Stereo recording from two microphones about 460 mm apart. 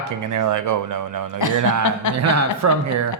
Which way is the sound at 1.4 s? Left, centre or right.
Left.